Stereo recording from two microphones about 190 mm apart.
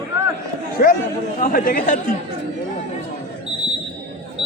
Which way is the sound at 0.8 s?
55° left (ahead or behind).